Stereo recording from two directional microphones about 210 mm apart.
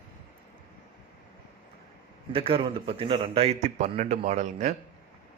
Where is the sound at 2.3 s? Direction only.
25° right (ahead or behind).